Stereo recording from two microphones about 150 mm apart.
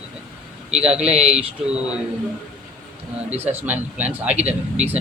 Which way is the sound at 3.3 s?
45° right (ahead or behind).